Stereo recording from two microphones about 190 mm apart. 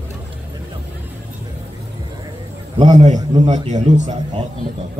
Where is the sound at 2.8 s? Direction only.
35° right (ahead or behind).